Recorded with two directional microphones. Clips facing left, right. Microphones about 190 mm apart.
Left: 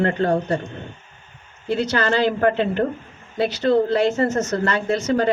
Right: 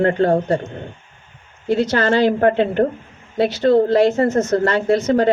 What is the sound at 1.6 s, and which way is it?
Speech, 50° right (ahead or behind).